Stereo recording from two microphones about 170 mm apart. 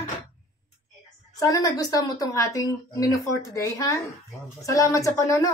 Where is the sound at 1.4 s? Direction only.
20° left (ahead or behind).